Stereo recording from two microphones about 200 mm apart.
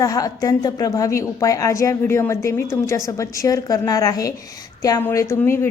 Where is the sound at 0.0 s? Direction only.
15° left (ahead or behind).